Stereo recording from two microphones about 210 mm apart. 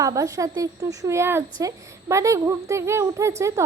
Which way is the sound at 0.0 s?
15° right (ahead or behind).